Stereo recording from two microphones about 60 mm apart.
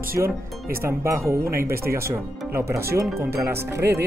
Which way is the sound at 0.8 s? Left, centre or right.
Right.